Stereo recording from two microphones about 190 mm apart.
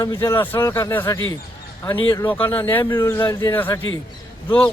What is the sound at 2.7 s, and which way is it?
Speech, 15° left (ahead or behind).